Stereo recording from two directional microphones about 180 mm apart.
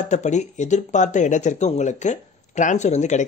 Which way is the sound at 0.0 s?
40° left (ahead or behind).